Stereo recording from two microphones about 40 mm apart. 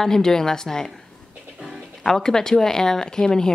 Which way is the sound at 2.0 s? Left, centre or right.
Centre.